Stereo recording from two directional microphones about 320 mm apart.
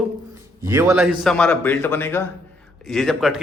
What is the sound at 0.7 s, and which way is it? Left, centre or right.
A man's voice, centre.